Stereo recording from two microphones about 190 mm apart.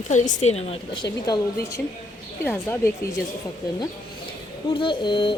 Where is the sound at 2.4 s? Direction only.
10° left (ahead or behind).